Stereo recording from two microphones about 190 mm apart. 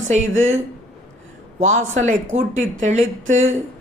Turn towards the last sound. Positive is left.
turn(degrees=-40)  # may be behind; listen again after turning